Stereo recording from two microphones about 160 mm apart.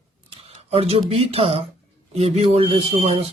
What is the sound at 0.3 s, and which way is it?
Speech, 40° right (ahead or behind).